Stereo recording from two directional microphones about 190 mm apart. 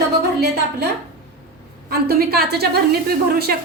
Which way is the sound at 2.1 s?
55° right (ahead or behind).